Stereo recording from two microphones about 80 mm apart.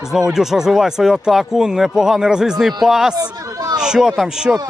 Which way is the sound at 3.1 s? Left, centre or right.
Right.